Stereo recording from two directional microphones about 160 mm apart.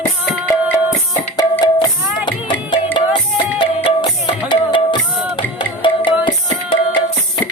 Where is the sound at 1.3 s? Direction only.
25° left (ahead or behind).